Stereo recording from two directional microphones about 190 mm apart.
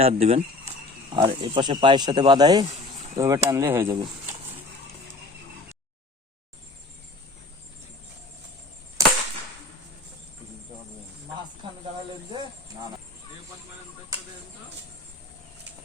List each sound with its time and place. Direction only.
0.0 s speech: 30° right (ahead or behind); by 3.9 s 10° right (ahead or behind)